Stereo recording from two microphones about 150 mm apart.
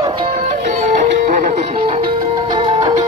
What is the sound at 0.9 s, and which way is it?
Music, 60° right (ahead or behind).